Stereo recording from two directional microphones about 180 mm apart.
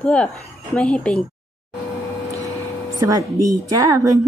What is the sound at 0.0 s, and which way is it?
Speech, 5° left (ahead or behind).